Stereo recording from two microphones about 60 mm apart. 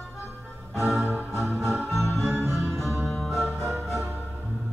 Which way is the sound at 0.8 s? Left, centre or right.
Centre.